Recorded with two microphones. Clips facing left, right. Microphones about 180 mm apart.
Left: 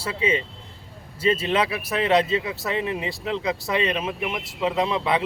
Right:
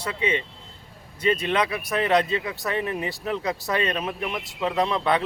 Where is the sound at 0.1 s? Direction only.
30° left (ahead or behind).